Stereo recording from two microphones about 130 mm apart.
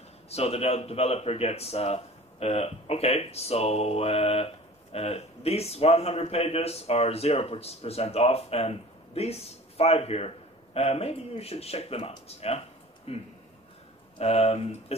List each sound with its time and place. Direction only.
0.3 s a man's voice: 50° left (ahead or behind)